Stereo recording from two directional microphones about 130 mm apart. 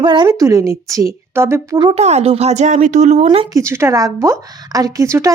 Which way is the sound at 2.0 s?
55° right (ahead or behind).